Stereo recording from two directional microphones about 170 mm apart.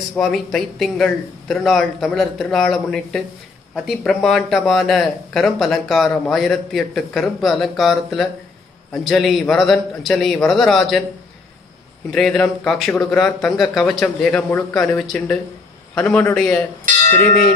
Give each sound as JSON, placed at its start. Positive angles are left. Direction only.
{"t": 0.2, "sound": "speech", "side_deg": 0}
{"t": 12.1, "sound": "speech", "side_deg": 5}
{"t": 12.9, "sound": "a man's voice", "side_deg": 15}
{"t": 13.2, "sound": "a man's voice", "side_deg": 0}